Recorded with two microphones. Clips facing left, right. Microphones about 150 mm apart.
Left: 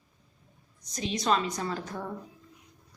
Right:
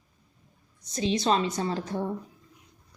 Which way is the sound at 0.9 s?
30° right (ahead or behind).